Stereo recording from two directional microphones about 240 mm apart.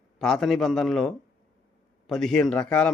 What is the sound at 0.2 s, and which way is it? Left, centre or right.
A man's voice, centre.